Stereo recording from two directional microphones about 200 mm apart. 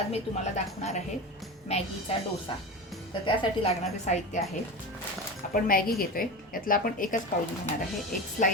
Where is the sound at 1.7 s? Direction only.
30° left (ahead or behind).